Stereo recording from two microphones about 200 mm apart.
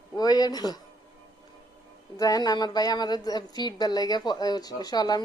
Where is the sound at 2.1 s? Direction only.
20° left (ahead or behind).